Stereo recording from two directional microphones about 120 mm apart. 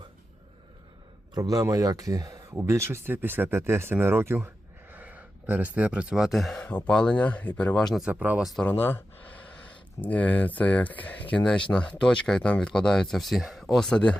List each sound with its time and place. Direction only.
1.3 s a man's voice: 30° right (ahead or behind); by 7.9 s 10° left (ahead or behind)
7.9 s speech: 10° right (ahead or behind)
8.6 s speech: 15° left (ahead or behind)